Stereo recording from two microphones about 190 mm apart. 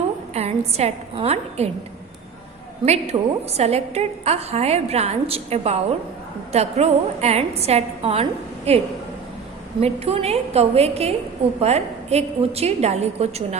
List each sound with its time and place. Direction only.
0.3 s a woman's voice: 35° right (ahead or behind)
2.8 s a woman's voice: 35° right (ahead or behind)
9.8 s a woman's voice: 30° right (ahead or behind)